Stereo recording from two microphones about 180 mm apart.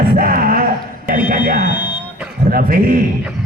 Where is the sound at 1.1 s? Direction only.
50° right (ahead or behind).